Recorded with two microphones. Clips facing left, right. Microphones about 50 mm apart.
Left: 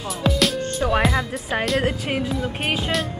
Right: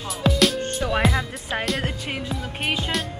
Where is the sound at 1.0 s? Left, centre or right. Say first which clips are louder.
Left 1 dB; centre.